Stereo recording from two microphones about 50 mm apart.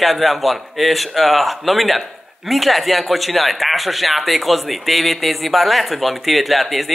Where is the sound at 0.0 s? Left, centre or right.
Centre.